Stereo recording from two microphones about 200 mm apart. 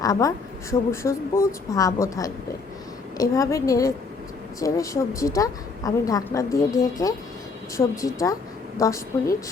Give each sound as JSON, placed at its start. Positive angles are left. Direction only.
{"t": 0.0, "sound": "a woman's voice", "side_deg": 15}